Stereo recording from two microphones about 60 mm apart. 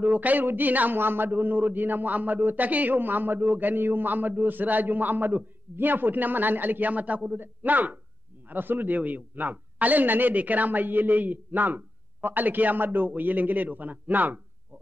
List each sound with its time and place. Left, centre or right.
0.0 s a man's voice: right